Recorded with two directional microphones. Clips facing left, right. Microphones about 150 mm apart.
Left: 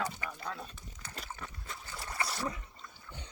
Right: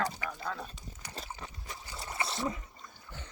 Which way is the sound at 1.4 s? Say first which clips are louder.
Even; 20° right (ahead or behind).